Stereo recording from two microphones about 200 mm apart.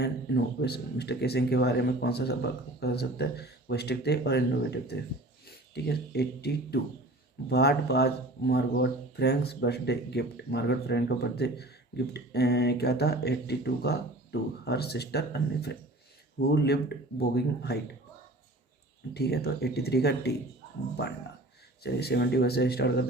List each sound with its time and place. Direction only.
0.0 s speech: 55° left (ahead or behind)
19.1 s speech: 50° left (ahead or behind)
21.8 s speech: 55° left (ahead or behind)